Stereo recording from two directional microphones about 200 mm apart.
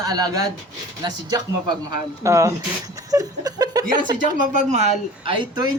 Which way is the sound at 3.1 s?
20° right (ahead or behind).